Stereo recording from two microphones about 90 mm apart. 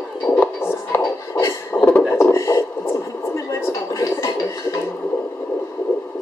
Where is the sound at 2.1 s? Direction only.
30° left (ahead or behind).